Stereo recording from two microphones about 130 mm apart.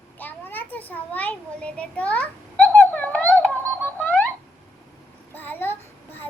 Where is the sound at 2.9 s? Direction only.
10° left (ahead or behind).